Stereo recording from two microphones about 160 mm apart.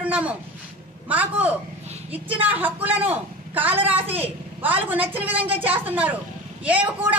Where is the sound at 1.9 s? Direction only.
35° right (ahead or behind).